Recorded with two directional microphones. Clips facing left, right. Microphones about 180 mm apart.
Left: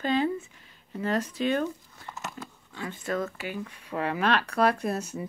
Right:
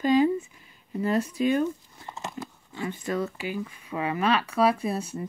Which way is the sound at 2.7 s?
10° right (ahead or behind).